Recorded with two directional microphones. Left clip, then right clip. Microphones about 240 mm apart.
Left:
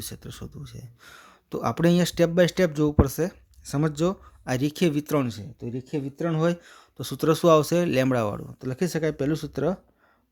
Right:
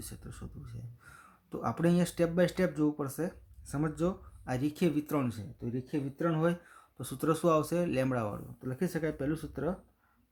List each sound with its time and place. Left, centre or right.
0.0 s speech: left